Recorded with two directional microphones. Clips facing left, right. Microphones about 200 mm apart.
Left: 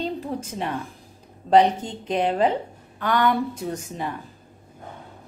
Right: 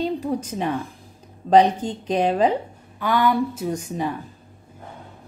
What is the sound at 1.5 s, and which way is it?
A woman's voice, 20° right (ahead or behind).